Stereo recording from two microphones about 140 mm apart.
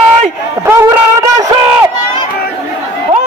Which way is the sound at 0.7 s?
20° right (ahead or behind).